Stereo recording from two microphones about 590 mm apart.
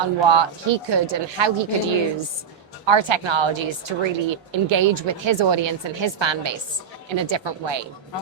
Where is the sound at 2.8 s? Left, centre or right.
Right.